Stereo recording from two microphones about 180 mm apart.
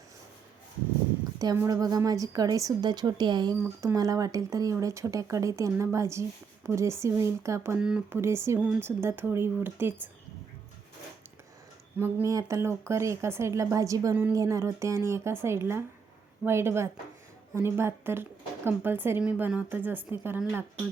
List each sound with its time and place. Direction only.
1.4 s speech: 20° right (ahead or behind)
7.8 s speech: 5° right (ahead or behind)
11.9 s speech: 15° right (ahead or behind)